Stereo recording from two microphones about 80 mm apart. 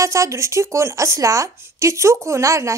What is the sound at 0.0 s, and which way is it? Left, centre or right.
A woman's voice, right.